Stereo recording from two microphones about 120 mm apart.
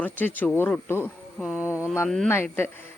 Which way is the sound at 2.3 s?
20° left (ahead or behind).